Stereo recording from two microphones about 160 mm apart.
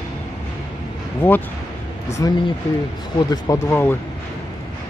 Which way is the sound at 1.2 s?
15° left (ahead or behind).